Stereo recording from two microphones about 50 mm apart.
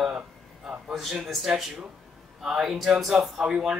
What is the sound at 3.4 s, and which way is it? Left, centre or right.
Speech, centre.